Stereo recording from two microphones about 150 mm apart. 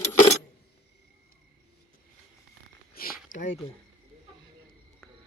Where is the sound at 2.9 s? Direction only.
75° left (ahead or behind).